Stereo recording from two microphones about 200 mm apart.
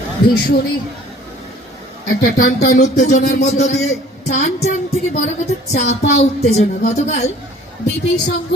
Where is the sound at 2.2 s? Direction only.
45° left (ahead or behind).